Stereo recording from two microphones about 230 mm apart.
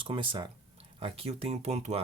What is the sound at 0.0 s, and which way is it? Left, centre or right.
Speech, right.